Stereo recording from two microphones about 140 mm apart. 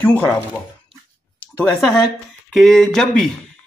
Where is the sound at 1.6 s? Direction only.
5° left (ahead or behind).